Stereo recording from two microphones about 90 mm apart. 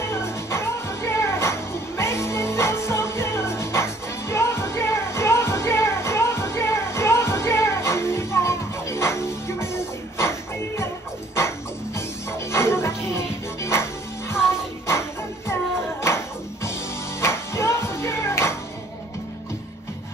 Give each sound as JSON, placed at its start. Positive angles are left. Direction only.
{"t": 0.0, "sound": "music", "side_deg": 30}
{"t": 11.3, "sound": "music", "side_deg": 30}
{"t": 14.9, "sound": "music", "side_deg": 30}
{"t": 17.2, "sound": "music", "side_deg": 30}